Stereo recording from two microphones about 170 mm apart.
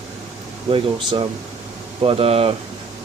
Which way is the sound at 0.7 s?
30° right (ahead or behind).